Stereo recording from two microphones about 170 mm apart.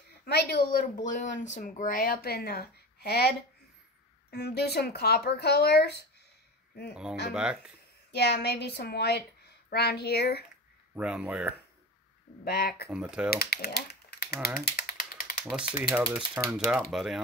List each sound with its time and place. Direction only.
0.2 s speech: 70° left (ahead or behind)
7.2 s speech: 5° right (ahead or behind)
8.1 s speech: 70° left (ahead or behind)
11.0 s speech: 5° right (ahead or behind)
12.4 s speech: 65° left (ahead or behind)
12.9 s speech: 5° right (ahead or behind)
13.3 s typing: 65° left (ahead or behind)
15.5 s speech: 5° right (ahead or behind)